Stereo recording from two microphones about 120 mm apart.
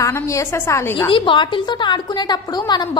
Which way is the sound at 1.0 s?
45° left (ahead or behind).